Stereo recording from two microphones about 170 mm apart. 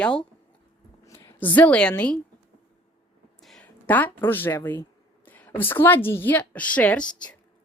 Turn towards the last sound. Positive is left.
turn(degrees=5)  # may be behind; listen again after turning